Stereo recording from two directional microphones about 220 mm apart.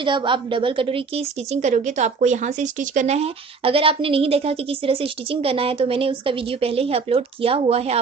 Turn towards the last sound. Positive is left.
turn(degrees=-25)  # may be behind; listen again after turning